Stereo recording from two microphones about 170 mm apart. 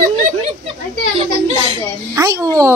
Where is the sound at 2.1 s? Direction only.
20° right (ahead or behind).